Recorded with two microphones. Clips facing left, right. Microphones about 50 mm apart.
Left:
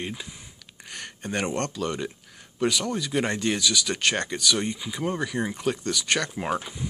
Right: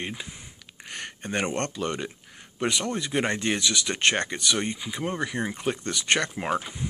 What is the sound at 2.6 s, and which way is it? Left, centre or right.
Speech, right.